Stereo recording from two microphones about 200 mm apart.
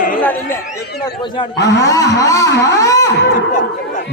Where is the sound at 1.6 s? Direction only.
60° left (ahead or behind).